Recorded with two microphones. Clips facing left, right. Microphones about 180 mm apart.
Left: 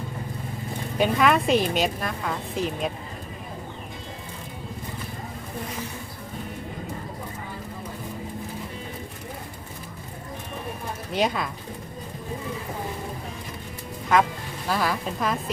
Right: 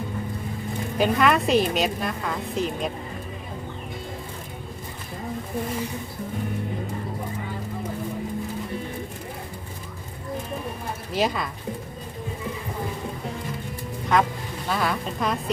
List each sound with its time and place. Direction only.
0.9 s a woman's voice: centre (ahead or behind)
11.1 s a woman's voice: centre (ahead or behind)
14.1 s a woman's voice: centre (ahead or behind)